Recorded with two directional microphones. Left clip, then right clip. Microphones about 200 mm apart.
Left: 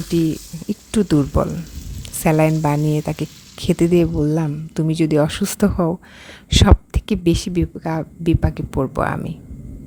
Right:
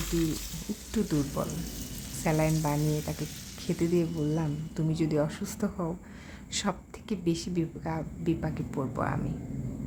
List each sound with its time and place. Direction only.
0.9 s a woman's voice: 40° left (ahead or behind)